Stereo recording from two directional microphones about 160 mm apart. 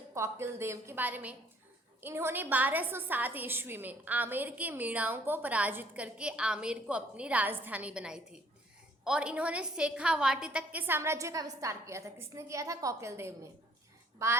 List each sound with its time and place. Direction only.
0.1 s a woman's voice: 15° right (ahead or behind)